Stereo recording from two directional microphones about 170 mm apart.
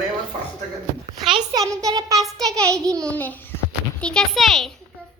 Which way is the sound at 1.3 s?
20° right (ahead or behind).